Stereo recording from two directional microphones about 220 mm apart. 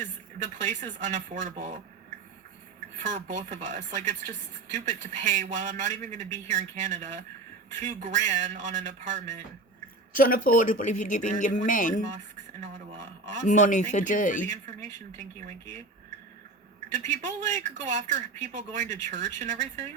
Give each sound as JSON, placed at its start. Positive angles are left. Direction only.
{"t": 0.3, "sound": "speech", "side_deg": -30}
{"t": 10.2, "sound": "speech", "side_deg": 40}
{"t": 12.5, "sound": "speech", "side_deg": -30}
{"t": 13.5, "sound": "speech", "side_deg": 35}
{"t": 14.7, "sound": "speech", "side_deg": -30}
{"t": 17.1, "sound": "speech", "side_deg": -30}